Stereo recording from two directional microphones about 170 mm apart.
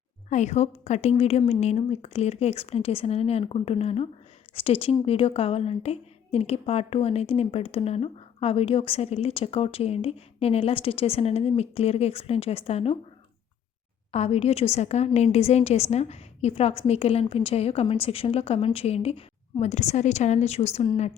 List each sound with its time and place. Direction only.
0.3 s a woman's voice: 45° left (ahead or behind)
14.1 s a woman's voice: 40° left (ahead or behind)